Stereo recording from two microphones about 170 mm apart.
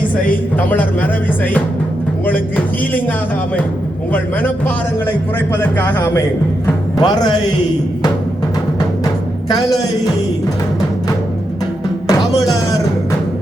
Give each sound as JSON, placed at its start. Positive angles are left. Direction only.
{"t": 0.7, "sound": "a man's voice", "side_deg": 10}
{"t": 4.1, "sound": "a man's voice", "side_deg": 10}
{"t": 7.0, "sound": "speech", "side_deg": 25}
{"t": 9.5, "sound": "speech", "side_deg": 25}
{"t": 12.0, "sound": "music", "side_deg": 20}